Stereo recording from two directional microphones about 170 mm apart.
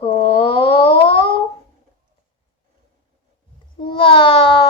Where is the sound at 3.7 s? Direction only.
30° left (ahead or behind).